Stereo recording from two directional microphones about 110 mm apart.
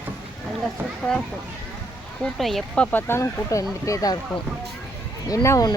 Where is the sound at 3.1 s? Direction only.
30° left (ahead or behind).